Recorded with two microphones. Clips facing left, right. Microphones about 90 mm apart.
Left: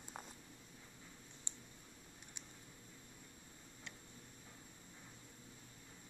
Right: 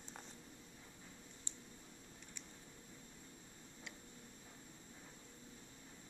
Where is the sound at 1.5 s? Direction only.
20° left (ahead or behind).